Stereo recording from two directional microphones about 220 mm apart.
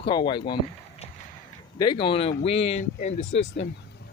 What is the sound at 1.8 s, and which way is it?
Speech, 20° left (ahead or behind).